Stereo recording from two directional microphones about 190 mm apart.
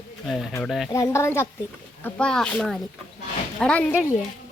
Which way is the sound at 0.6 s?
Centre (ahead or behind).